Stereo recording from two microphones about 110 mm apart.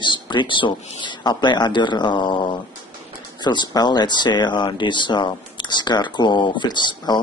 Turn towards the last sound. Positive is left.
turn(degrees=45)  # may be behind; listen again after turning